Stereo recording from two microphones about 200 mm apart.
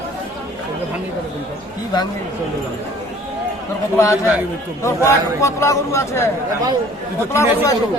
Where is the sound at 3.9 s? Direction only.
15° left (ahead or behind).